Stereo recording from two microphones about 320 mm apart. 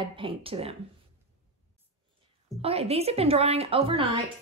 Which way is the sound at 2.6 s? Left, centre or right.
Centre.